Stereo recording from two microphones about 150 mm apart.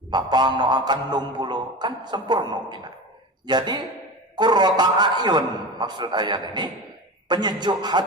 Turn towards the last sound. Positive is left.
turn(degrees=-30)  # may be behind; listen again after turning